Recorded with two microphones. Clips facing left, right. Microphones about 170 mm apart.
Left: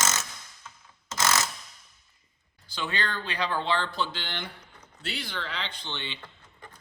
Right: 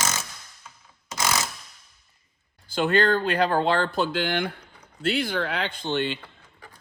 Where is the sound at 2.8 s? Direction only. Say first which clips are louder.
Right 12 dB; 50° right (ahead or behind).